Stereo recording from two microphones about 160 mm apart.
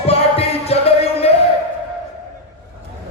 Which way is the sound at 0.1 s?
40° left (ahead or behind).